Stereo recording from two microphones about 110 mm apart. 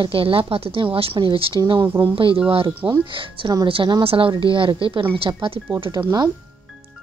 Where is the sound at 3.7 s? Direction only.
50° right (ahead or behind).